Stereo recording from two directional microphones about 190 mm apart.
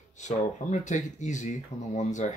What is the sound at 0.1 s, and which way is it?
Speech, 40° left (ahead or behind).